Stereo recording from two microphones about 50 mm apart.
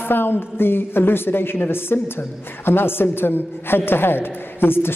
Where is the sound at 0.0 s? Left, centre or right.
Left.